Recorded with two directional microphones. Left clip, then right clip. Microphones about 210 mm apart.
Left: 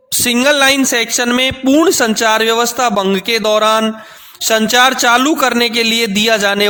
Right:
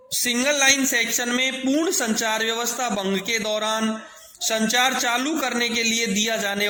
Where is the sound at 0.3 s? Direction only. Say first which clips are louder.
Left 9 dB; 45° left (ahead or behind).